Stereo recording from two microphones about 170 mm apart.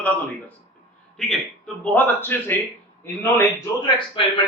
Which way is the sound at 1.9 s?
10° left (ahead or behind).